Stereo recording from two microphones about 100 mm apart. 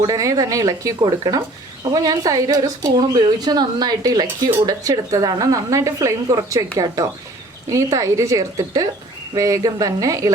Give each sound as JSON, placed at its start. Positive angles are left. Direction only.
{"t": 0.0, "sound": "a woman's voice", "side_deg": -35}
{"t": 1.0, "sound": "a woman's voice", "side_deg": -45}